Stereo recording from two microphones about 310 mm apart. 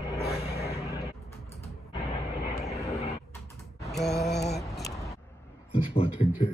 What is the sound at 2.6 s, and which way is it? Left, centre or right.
Vehicle, centre.